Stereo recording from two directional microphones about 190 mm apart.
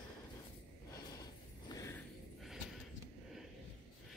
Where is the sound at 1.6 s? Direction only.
20° left (ahead or behind).